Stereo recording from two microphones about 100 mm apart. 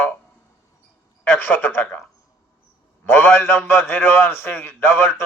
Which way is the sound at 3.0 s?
20° left (ahead or behind).